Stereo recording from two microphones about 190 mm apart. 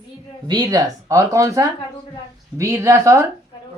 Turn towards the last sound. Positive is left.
turn(degrees=-15)  # may be behind; listen again after turning